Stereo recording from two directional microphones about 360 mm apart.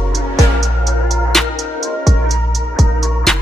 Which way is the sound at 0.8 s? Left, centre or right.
Centre.